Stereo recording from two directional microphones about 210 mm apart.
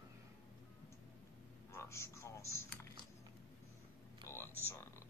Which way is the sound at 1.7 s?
15° left (ahead or behind).